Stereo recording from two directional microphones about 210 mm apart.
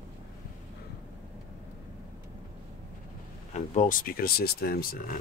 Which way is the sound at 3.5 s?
35° left (ahead or behind).